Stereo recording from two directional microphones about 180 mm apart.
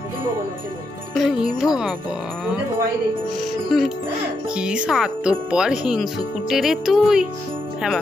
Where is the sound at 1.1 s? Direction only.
Centre (ahead or behind).